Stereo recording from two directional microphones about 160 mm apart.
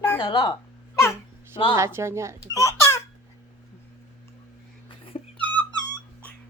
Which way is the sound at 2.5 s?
20° left (ahead or behind).